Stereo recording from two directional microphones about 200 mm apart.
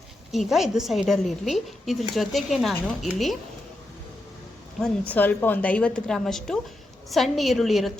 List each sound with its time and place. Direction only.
0.3 s a woman's voice: centre (ahead or behind)
4.8 s a woman's voice: 10° left (ahead or behind)